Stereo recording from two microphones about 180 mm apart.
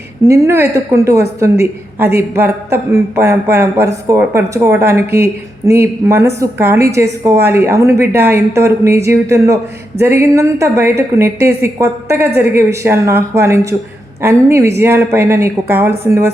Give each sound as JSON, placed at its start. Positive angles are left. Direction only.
{"t": 0.3, "sound": "a woman's voice", "side_deg": -15}